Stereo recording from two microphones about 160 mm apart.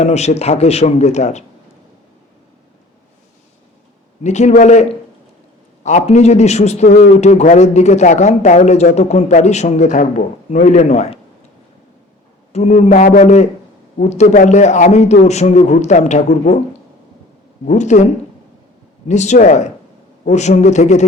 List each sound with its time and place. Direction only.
0.0 s a man's voice: 45° left (ahead or behind)
4.2 s a man's voice: 45° left (ahead or behind)
12.5 s a man's voice: 45° left (ahead or behind)
17.7 s a man's voice: 50° left (ahead or behind)